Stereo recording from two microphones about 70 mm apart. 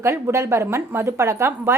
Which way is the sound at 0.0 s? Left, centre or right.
Right.